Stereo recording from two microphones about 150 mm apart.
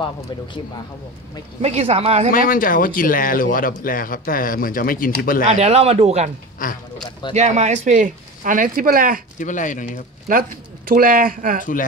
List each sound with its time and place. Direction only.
1.6 s speech: 45° right (ahead or behind)
2.3 s speech: 70° left (ahead or behind)
5.5 s speech: 45° right (ahead or behind)
6.6 s speech: 65° left (ahead or behind)
7.3 s speech: 50° right (ahead or behind); by 9.2 s 70° right (ahead or behind)
9.4 s speech: 60° left (ahead or behind)
10.2 s speech: 70° right (ahead or behind)